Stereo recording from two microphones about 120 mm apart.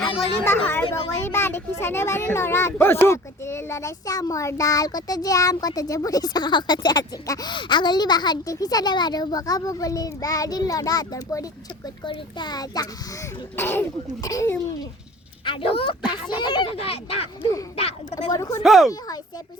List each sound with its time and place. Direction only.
0.4 s speech: 15° left (ahead or behind); by 12.9 s 30° left (ahead or behind)
13.6 s speech: 20° left (ahead or behind)
14.2 s speech: 30° left (ahead or behind)
15.4 s speech: 45° left (ahead or behind)
18.3 s speech: 25° left (ahead or behind)
18.6 s speech: centre (ahead or behind)
18.9 s speech: 30° left (ahead or behind)